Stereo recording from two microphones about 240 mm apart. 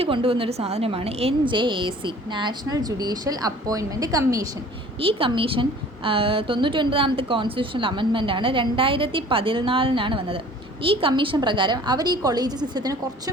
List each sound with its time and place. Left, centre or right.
0.0 s a woman's voice: right